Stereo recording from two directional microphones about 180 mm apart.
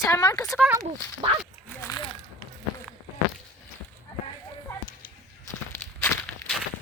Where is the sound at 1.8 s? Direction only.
20° left (ahead or behind).